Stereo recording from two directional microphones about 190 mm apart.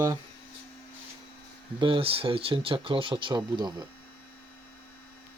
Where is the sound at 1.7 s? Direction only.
30° right (ahead or behind).